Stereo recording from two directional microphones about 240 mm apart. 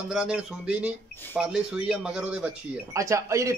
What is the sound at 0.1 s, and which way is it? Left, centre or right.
Speech, centre.